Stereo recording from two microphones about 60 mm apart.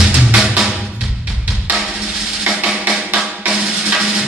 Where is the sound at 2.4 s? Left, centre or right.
Centre.